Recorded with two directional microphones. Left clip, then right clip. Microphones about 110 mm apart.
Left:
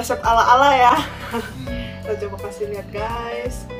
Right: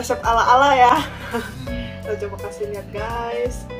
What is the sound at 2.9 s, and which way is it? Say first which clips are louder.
Speech: even; 20° left (ahead or behind).